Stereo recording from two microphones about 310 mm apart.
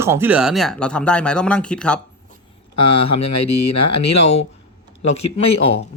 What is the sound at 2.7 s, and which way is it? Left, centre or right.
Speech, left.